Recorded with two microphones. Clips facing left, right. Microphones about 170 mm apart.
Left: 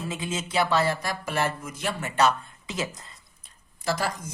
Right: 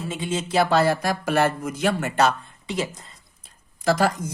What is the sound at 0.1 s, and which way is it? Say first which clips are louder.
Speech: right 6 dB; 25° right (ahead or behind).